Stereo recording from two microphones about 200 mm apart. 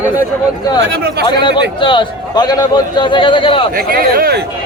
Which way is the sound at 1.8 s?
25° left (ahead or behind).